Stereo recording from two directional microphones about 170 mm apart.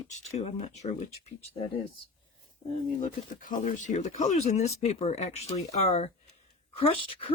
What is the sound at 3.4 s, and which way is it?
Speech, 50° left (ahead or behind).